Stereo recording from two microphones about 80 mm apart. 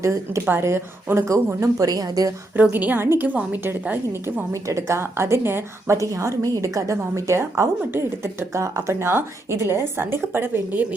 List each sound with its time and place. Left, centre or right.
0.0 s a woman's voice: right
2.6 s a woman's voice: right
4.7 s a woman's voice: right